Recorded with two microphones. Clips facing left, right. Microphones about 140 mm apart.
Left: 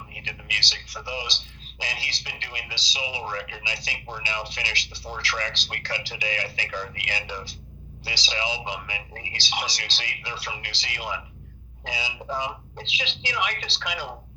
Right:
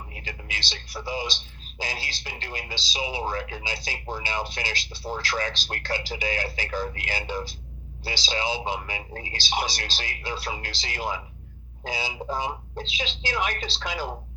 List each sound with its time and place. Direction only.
0.1 s a man's voice: 40° right (ahead or behind)